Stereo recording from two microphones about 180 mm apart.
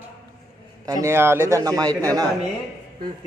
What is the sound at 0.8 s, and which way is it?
A man's voice, 15° right (ahead or behind).